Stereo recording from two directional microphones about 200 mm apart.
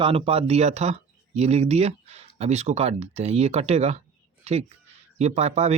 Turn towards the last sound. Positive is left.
turn(degrees=-30)  # may be behind; listen again after turning